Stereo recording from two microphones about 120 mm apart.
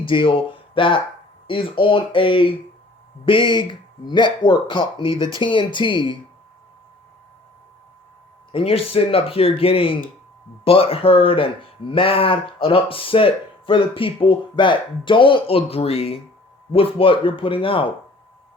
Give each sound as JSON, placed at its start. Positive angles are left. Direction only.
{"t": 0.0, "sound": "speech", "side_deg": 45}
{"t": 8.5, "sound": "speech", "side_deg": 50}